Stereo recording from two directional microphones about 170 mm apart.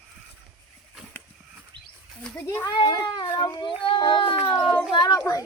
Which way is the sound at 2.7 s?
25° left (ahead or behind).